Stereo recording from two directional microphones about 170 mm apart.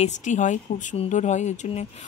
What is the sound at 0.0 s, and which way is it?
Speech, 45° left (ahead or behind).